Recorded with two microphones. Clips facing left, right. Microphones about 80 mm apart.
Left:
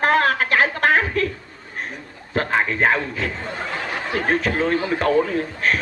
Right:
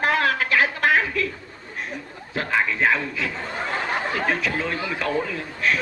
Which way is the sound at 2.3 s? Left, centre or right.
Left.